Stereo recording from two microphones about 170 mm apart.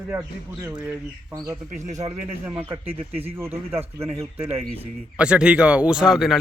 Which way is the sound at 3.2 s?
15° right (ahead or behind).